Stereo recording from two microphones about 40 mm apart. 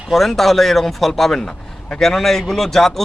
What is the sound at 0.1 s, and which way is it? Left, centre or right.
Speech, centre.